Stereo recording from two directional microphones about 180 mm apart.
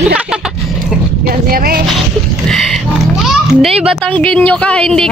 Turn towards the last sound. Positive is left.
turn(degrees=5)  # may be behind; listen again after turning